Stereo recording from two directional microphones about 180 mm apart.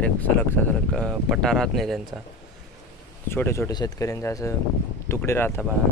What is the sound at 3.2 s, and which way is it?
Speech, 15° left (ahead or behind).